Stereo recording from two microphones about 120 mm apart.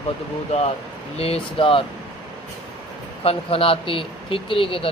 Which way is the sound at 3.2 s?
50° left (ahead or behind).